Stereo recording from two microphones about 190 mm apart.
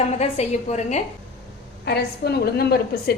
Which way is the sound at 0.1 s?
35° left (ahead or behind).